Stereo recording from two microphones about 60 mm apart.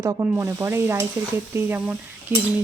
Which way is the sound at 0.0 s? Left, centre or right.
Right.